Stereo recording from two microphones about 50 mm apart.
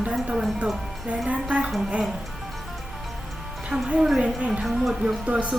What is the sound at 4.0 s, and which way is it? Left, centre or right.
Speech, centre.